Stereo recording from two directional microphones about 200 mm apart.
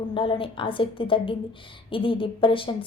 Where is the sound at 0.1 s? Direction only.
25° left (ahead or behind).